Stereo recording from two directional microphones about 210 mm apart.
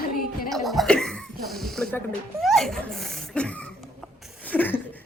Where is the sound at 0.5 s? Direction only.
Centre (ahead or behind).